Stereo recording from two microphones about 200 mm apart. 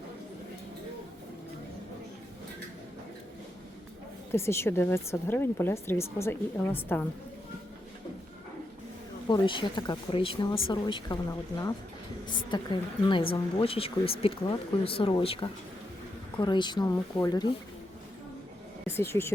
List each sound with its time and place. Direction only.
4.3 s speech: 10° left (ahead or behind)
9.3 s speech: 25° left (ahead or behind)
12.3 s speech: 25° left (ahead or behind)
18.9 s speech: 10° left (ahead or behind)